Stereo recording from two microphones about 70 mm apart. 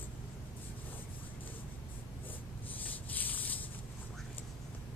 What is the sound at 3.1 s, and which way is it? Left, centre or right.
Sanding, left.